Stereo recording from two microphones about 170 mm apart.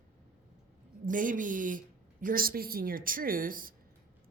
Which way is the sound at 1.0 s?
50° right (ahead or behind).